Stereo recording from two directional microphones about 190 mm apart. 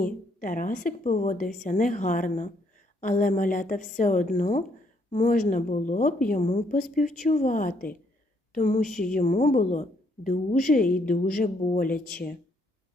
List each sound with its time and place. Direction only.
0.0 s a woman's voice: 45° left (ahead or behind)